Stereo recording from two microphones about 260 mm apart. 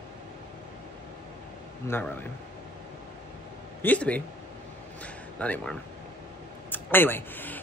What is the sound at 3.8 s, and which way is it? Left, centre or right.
A man's voice, centre.